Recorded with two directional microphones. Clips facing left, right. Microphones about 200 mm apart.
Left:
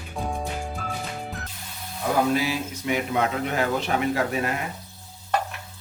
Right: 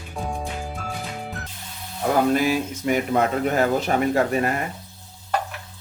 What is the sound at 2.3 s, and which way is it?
A man's voice, 50° right (ahead or behind).